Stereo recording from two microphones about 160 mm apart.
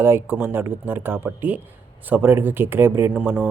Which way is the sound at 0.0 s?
15° right (ahead or behind).